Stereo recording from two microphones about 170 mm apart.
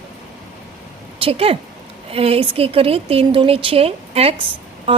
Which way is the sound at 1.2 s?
35° right (ahead or behind).